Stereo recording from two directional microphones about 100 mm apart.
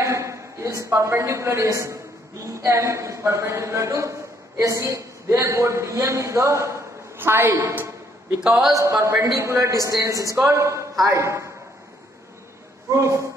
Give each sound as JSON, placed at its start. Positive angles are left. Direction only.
{"t": 0.0, "sound": "a woman's voice", "side_deg": -30}
{"t": 7.2, "sound": "a sound", "side_deg": -25}
{"t": 8.5, "sound": "a man's voice", "side_deg": -5}
{"t": 9.0, "sound": "a man's voice", "side_deg": -30}
{"t": 12.9, "sound": "a man's voice", "side_deg": -30}